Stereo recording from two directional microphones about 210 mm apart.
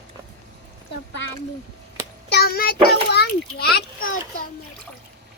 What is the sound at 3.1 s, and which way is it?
Speech, 50° left (ahead or behind).